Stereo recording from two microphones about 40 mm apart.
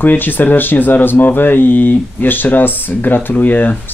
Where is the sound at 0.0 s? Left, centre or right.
Left.